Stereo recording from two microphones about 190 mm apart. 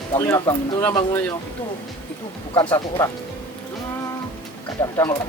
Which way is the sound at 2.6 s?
15° left (ahead or behind).